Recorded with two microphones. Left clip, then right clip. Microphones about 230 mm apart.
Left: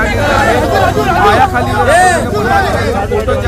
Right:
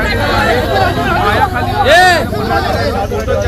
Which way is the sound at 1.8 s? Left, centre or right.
Right.